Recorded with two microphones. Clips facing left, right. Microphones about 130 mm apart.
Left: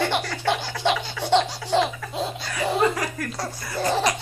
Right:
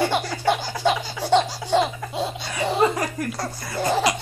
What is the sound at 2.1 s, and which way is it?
Baby laughter, centre (ahead or behind).